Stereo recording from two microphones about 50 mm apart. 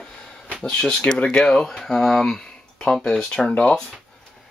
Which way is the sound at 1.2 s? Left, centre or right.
Left.